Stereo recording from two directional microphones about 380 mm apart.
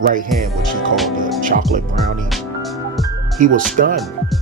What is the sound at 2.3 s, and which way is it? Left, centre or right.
Music, centre.